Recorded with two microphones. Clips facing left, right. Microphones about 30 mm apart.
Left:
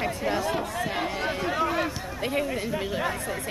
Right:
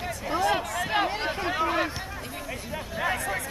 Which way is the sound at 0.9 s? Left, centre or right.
Right.